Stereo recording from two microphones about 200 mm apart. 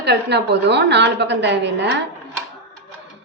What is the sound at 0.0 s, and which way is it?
A woman's voice, 55° right (ahead or behind).